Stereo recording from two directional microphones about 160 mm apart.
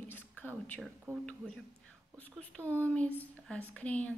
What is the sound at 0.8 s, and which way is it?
Speech, centre (ahead or behind).